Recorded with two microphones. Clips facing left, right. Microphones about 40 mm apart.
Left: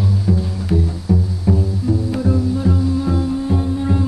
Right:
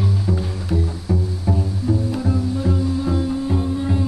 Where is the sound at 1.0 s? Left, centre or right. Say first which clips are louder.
Left 4 dB; centre.